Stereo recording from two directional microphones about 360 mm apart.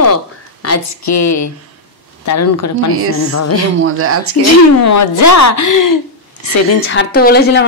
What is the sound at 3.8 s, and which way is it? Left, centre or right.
Speech, right.